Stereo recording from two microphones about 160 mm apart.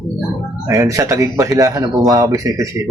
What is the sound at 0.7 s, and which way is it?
Speech, 20° right (ahead or behind).